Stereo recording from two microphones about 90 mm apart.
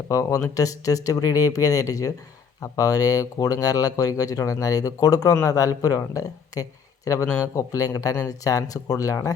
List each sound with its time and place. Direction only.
0.1 s speech: 40° left (ahead or behind)